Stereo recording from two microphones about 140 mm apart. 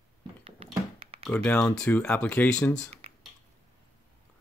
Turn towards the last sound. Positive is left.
turn(degrees=-45)  # may be behind; listen again after turning